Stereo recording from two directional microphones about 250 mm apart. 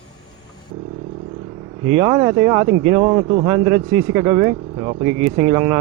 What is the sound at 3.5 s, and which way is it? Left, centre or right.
Speech, centre.